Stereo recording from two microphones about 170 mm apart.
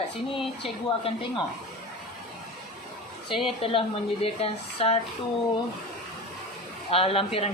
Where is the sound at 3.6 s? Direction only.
35° left (ahead or behind).